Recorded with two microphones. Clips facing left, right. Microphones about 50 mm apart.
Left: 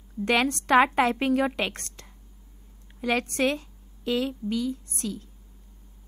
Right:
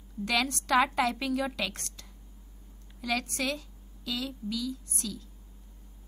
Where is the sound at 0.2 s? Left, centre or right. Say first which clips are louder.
Left 6 dB; left.